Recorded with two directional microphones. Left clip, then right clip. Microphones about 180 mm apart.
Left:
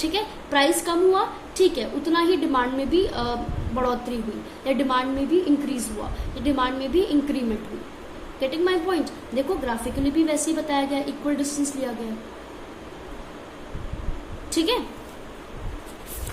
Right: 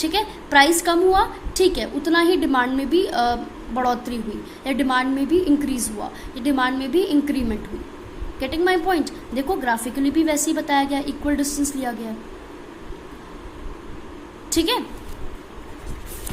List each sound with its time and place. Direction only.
0.0 s a woman's voice: 45° right (ahead or behind)
14.5 s a woman's voice: 40° right (ahead or behind)